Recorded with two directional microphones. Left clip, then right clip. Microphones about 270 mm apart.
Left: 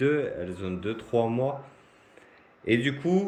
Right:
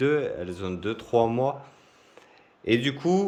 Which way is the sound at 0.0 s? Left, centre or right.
Centre.